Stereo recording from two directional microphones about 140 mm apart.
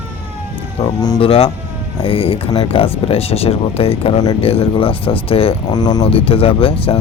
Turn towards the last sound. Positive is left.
turn(degrees=45)  # may be behind; listen again after turning